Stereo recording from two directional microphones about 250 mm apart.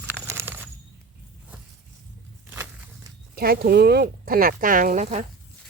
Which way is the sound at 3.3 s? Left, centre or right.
Right.